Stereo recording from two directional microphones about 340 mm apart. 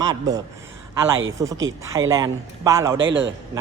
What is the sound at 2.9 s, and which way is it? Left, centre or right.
Speech, right.